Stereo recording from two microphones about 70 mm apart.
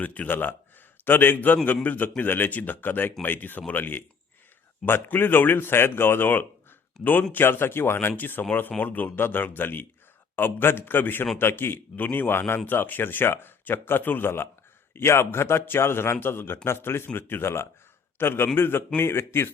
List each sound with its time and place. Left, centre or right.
0.0 s a man's voice: left